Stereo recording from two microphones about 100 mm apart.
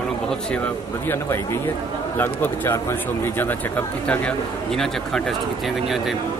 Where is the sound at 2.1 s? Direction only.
20° left (ahead or behind).